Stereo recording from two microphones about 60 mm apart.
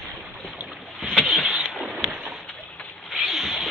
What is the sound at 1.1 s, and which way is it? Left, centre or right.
Vehicle, centre.